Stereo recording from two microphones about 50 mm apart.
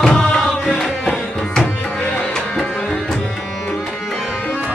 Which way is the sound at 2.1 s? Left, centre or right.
Centre.